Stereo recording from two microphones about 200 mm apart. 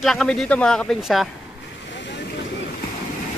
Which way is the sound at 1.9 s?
60° left (ahead or behind).